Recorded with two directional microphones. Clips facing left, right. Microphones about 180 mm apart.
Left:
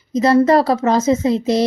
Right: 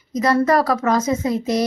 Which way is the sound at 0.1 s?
25° left (ahead or behind).